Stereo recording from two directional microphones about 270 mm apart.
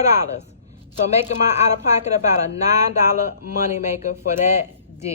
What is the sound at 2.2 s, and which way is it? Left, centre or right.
Speech, left.